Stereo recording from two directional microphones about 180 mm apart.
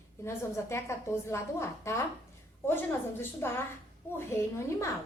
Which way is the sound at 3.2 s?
15° left (ahead or behind).